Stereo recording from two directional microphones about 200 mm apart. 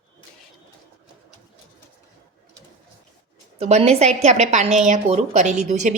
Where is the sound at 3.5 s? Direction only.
30° right (ahead or behind).